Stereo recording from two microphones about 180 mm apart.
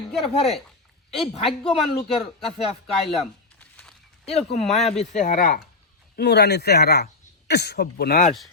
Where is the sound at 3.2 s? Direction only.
5° left (ahead or behind).